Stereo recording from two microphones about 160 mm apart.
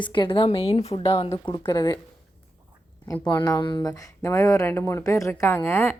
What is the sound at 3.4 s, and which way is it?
Speech, 25° left (ahead or behind).